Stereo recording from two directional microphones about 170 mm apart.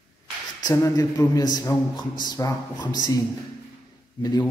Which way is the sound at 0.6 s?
20° left (ahead or behind).